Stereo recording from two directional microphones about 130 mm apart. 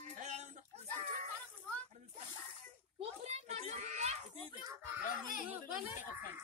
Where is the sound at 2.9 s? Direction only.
55° right (ahead or behind).